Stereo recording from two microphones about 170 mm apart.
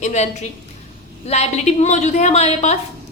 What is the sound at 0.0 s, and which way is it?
Speech, 40° left (ahead or behind).